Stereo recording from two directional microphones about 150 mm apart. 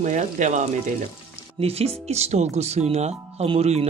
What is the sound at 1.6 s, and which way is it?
Speech, 45° right (ahead or behind).